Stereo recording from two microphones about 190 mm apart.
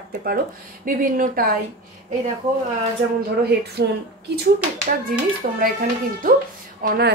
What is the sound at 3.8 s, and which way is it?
Speech, 60° right (ahead or behind).